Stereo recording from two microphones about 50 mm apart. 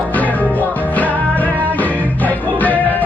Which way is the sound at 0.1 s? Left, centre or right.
Left.